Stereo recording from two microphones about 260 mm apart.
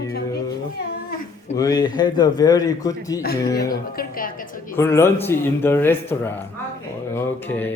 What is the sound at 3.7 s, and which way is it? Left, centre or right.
Speech, left.